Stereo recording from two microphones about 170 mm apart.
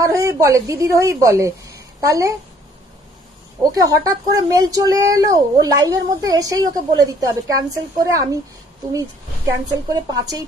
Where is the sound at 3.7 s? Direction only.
20° right (ahead or behind).